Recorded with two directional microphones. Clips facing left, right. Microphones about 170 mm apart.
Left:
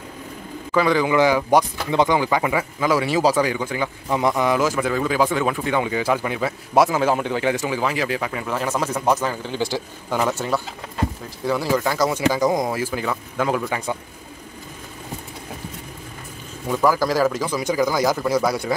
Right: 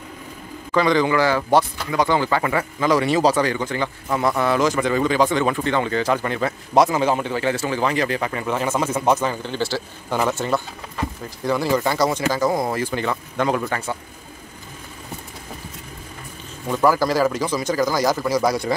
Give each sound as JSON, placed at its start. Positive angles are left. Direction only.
{"t": 0.7, "sound": "speech", "side_deg": 5}
{"t": 2.1, "sound": "speech", "side_deg": 10}
{"t": 10.4, "sound": "speech", "side_deg": 5}
{"t": 12.7, "sound": "speech", "side_deg": 5}
{"t": 16.6, "sound": "speech", "side_deg": 0}